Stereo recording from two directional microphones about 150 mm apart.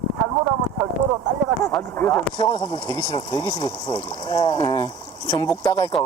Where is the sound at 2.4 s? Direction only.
30° left (ahead or behind).